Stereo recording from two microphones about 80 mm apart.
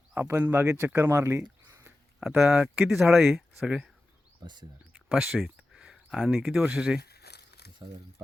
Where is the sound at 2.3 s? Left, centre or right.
Centre.